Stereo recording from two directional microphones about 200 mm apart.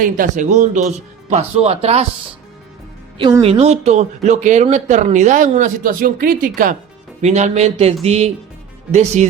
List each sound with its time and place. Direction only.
0.0 s speech: 40° right (ahead or behind)
3.2 s speech: 20° right (ahead or behind)